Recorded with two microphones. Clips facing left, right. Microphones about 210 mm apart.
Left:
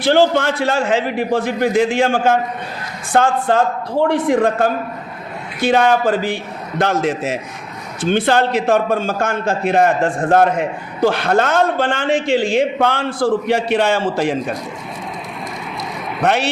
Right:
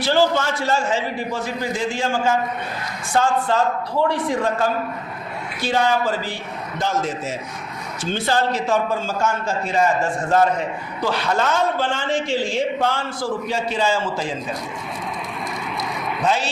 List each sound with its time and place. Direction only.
0.0 s a man's voice: 60° left (ahead or behind)
6.7 s a man's voice: 65° left (ahead or behind)
16.2 s a man's voice: 65° left (ahead or behind)